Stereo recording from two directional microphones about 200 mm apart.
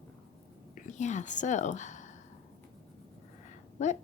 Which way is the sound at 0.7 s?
35° left (ahead or behind).